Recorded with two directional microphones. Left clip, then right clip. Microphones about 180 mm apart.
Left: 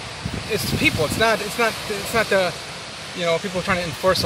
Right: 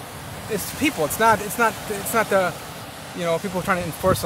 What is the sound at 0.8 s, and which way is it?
Speech, 10° right (ahead or behind).